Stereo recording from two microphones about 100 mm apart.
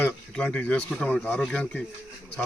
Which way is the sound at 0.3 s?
10° left (ahead or behind).